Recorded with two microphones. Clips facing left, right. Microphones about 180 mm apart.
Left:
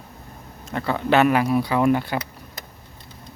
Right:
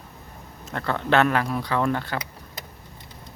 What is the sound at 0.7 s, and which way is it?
Speech, 5° left (ahead or behind).